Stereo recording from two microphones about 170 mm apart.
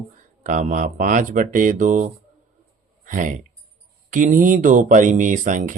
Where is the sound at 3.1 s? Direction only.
50° right (ahead or behind).